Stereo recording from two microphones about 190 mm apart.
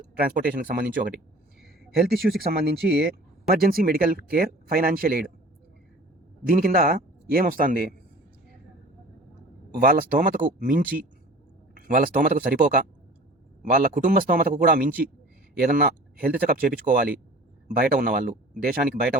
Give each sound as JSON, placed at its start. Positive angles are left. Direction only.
{"t": 0.2, "sound": "speech", "side_deg": -50}
{"t": 2.0, "sound": "speech", "side_deg": -50}
{"t": 6.4, "sound": "speech", "side_deg": -50}
{"t": 9.9, "sound": "speech", "side_deg": -45}